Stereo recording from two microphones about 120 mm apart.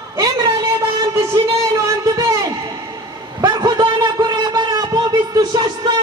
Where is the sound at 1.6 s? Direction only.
25° right (ahead or behind).